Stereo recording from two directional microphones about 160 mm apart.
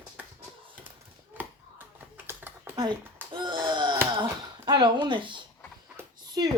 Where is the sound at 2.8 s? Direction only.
30° right (ahead or behind).